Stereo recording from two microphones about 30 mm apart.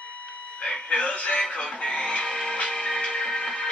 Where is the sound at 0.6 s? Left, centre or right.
Left.